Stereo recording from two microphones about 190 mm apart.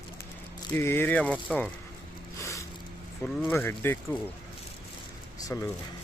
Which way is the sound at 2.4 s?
15° left (ahead or behind).